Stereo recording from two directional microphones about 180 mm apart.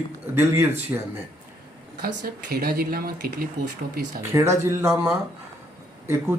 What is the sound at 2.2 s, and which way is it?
Speech, 55° right (ahead or behind).